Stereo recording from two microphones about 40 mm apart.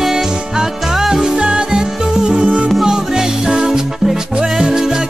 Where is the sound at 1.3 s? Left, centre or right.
Right.